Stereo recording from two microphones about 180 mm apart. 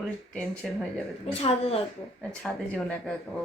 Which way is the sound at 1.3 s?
35° left (ahead or behind).